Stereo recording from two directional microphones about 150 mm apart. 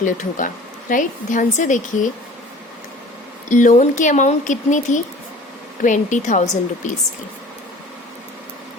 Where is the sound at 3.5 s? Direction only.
55° left (ahead or behind).